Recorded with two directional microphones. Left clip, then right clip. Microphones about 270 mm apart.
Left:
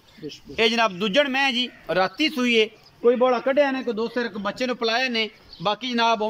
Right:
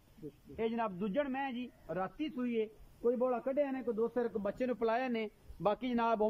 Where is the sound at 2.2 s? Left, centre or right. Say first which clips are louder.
Left 17 dB; centre.